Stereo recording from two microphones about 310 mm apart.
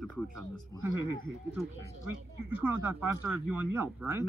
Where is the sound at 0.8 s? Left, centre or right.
Right.